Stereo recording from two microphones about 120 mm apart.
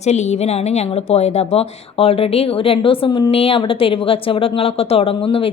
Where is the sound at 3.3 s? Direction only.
50° left (ahead or behind).